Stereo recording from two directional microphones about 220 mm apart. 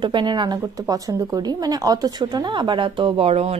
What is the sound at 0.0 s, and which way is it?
A woman's voice, 20° right (ahead or behind).